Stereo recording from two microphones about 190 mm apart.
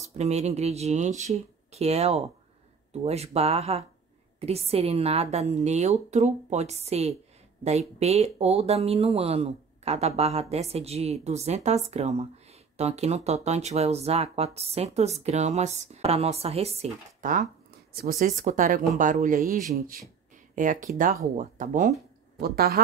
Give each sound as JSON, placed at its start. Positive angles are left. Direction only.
{"t": 0.0, "sound": "speech", "side_deg": -35}
{"t": 22.4, "sound": "speech", "side_deg": -55}